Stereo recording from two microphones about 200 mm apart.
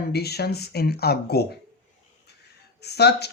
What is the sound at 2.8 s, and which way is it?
Speech, 55° left (ahead or behind).